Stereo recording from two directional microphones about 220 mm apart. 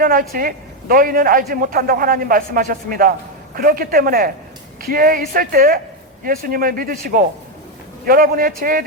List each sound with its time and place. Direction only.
0.0 s a man's voice: 40° right (ahead or behind)